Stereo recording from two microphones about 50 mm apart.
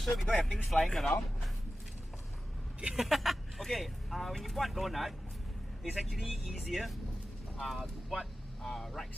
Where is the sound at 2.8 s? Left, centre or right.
Centre.